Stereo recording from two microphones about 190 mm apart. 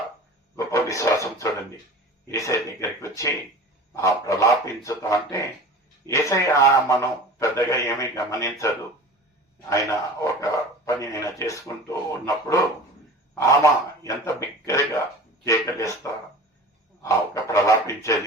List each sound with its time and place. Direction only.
0.5 s a sound: 15° left (ahead or behind)
2.2 s speech: 15° left (ahead or behind)
3.9 s speech: 15° left (ahead or behind)
14.0 s speech: 15° left (ahead or behind)